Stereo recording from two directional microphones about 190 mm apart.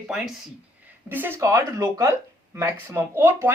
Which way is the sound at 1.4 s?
15° right (ahead or behind).